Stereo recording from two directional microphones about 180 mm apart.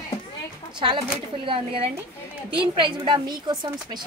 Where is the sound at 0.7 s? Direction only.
30° right (ahead or behind).